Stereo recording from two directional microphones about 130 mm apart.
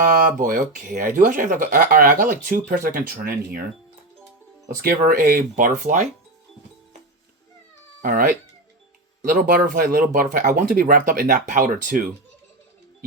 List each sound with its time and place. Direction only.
0.3 s speech: 90° right
4.9 s speech: 90° right; by 6.1 s 75° right (ahead or behind)
8.0 s speech: 90° right
9.3 s speech: 90° right